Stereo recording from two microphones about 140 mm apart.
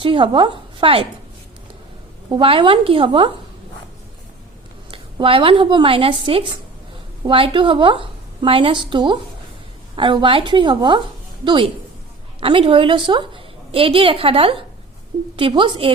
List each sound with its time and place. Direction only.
0.0 s a woman's voice: 40° right (ahead or behind)
2.3 s a woman's voice: 40° right (ahead or behind)
4.9 s a woman's voice: 40° right (ahead or behind)